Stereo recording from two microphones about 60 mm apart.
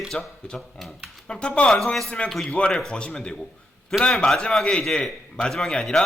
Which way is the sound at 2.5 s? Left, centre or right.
Centre.